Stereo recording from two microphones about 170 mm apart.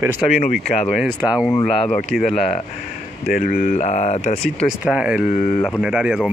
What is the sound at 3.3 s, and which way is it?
Speech, 55° left (ahead or behind).